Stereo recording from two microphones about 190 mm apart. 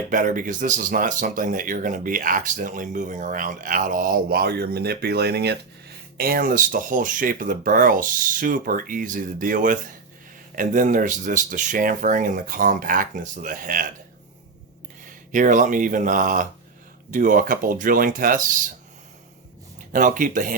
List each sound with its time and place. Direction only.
0.1 s speech: 45° right (ahead or behind)
15.0 s speech: 45° right (ahead or behind)
19.9 s speech: 45° right (ahead or behind)